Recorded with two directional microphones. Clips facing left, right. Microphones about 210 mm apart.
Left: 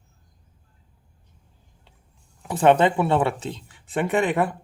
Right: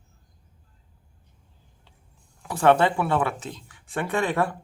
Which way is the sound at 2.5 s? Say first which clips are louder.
Left 2 dB; 20° left (ahead or behind).